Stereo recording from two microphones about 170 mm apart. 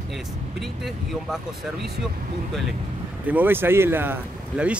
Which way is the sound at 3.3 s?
10° right (ahead or behind).